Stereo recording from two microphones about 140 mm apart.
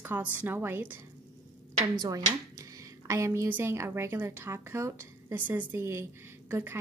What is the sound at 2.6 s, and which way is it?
A woman's voice, 25° right (ahead or behind).